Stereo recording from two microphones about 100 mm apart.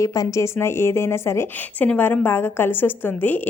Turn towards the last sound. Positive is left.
turn(degrees=20)  # may be behind; listen again after turning